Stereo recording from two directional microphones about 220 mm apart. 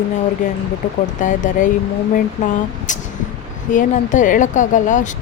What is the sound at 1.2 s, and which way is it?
Speech, 35° left (ahead or behind).